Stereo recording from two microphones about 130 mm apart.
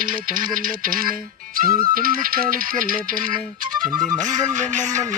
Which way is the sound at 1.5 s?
90° right.